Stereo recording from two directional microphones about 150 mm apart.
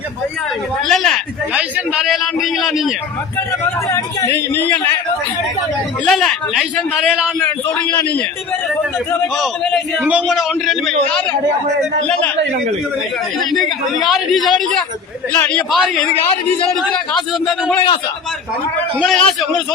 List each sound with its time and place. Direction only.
0.9 s a man's voice: 5° left (ahead or behind)
1.5 s a man's voice: 10° right (ahead or behind)
3.8 s speech: 20° left (ahead or behind)
6.1 s a man's voice: centre (ahead or behind)
7.9 s speech: 15° left (ahead or behind)
9.2 s a man's voice: centre (ahead or behind)
13.4 s a man's voice: centre (ahead or behind)
15.3 s a man's voice: 10° left (ahead or behind)
18.9 s a man's voice: centre (ahead or behind)